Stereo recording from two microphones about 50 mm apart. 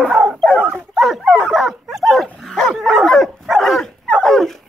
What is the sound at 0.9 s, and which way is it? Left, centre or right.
Speech, centre.